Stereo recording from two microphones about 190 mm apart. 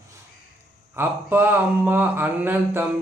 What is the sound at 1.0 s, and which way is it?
Speech, 10° right (ahead or behind).